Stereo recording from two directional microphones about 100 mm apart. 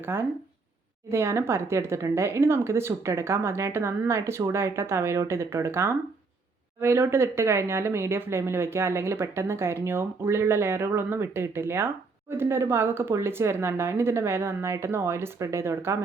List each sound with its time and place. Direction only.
0.0 s speech: 20° right (ahead or behind)